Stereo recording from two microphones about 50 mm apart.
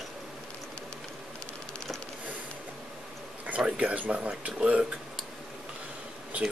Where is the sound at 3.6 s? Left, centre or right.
Right.